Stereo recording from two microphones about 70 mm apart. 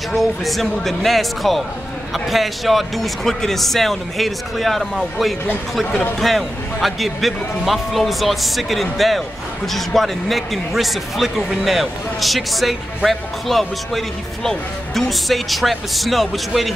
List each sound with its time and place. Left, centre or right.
0.1 s a man's voice: centre